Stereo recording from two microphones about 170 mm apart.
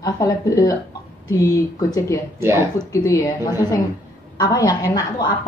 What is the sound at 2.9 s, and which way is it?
Speech, 20° left (ahead or behind).